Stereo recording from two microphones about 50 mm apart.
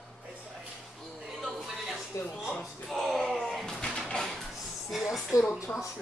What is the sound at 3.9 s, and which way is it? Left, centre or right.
Music, centre.